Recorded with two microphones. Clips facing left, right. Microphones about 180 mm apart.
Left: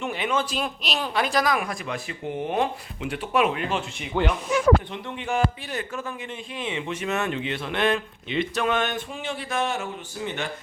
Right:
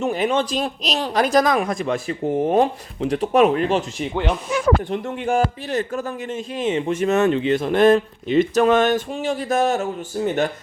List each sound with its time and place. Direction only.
0.0 s a man's voice: 40° right (ahead or behind)